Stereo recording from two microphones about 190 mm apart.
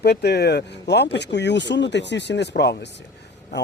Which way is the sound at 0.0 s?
60° left (ahead or behind).